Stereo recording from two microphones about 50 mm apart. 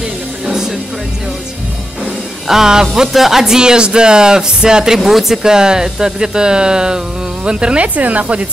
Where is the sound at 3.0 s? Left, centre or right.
Centre.